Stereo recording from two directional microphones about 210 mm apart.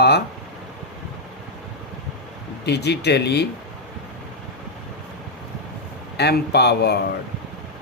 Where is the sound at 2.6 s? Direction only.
50° left (ahead or behind).